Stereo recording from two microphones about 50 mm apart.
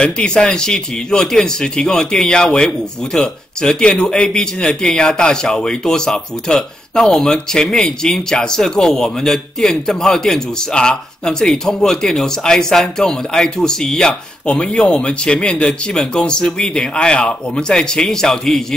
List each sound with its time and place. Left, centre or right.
0.0 s speech: centre